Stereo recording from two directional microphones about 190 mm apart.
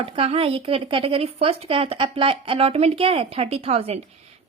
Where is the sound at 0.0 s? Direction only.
30° right (ahead or behind).